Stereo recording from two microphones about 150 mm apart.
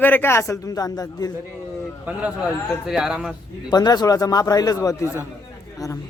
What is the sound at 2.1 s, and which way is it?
Speech, 10° right (ahead or behind).